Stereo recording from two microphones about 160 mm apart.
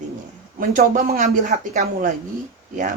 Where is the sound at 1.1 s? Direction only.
70° right (ahead or behind).